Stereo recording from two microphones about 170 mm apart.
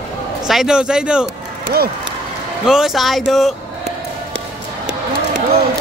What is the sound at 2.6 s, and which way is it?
Speech, centre (ahead or behind).